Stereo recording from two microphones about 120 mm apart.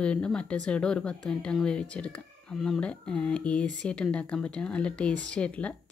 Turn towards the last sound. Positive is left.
turn(degrees=10)  # may be behind; listen again after turning